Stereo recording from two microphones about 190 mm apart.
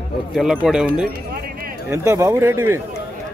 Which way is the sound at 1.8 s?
15° right (ahead or behind).